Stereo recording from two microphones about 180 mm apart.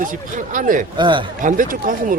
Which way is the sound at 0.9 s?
25° right (ahead or behind).